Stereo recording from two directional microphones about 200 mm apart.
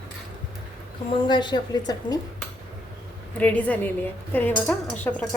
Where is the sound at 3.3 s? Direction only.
5° left (ahead or behind).